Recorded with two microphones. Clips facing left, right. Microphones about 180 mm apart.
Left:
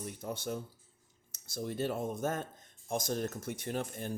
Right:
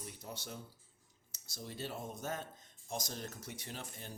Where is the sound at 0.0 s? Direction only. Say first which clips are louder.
Left 9 dB; 50° left (ahead or behind).